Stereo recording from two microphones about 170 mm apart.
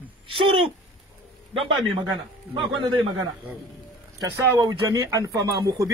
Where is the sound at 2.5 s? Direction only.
30° right (ahead or behind).